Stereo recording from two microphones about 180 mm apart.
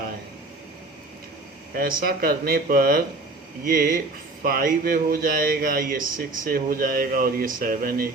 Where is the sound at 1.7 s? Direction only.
55° right (ahead or behind).